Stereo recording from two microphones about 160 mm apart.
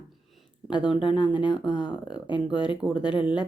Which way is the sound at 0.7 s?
30° left (ahead or behind).